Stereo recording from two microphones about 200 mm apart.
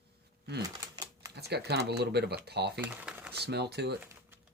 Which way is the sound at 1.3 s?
55° right (ahead or behind).